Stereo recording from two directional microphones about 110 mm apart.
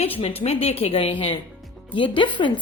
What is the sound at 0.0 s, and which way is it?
A woman's voice, 60° left (ahead or behind).